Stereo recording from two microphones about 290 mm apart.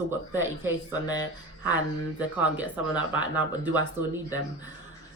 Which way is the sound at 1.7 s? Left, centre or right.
Centre.